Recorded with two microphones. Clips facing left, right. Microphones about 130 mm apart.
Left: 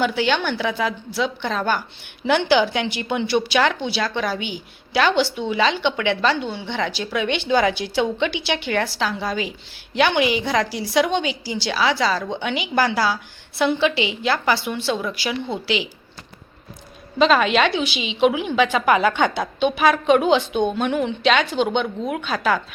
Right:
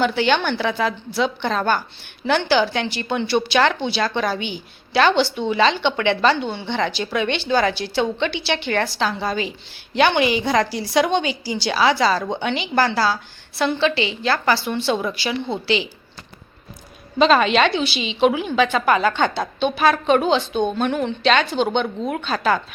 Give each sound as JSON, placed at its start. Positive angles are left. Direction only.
{"t": 0.0, "sound": "a woman's voice", "side_deg": 5}
{"t": 7.3, "sound": "a woman's voice", "side_deg": 15}
{"t": 14.7, "sound": "a woman's voice", "side_deg": 0}
{"t": 17.2, "sound": "a woman's voice", "side_deg": 5}